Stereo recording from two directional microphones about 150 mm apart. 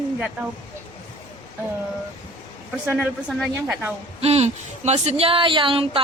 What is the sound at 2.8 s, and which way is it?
Speech, 15° right (ahead or behind).